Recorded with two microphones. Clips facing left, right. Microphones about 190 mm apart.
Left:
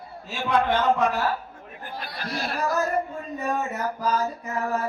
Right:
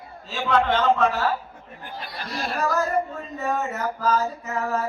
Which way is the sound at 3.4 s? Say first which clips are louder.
Right 1 dB; 15° left (ahead or behind).